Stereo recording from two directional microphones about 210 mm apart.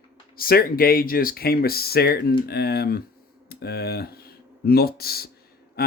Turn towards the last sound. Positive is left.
turn(degrees=50)  # may be behind; listen again after turning